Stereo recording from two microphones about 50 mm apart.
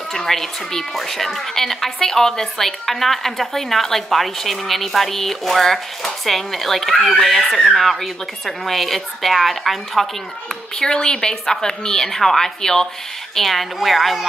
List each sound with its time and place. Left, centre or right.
0.1 s a woman's voice: centre
10.8 s a woman's voice: centre